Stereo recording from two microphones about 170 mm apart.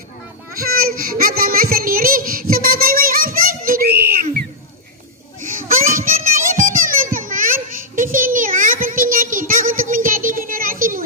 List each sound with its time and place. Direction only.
0.6 s child singing: 60° right (ahead or behind)
5.7 s children playing: 55° right (ahead or behind)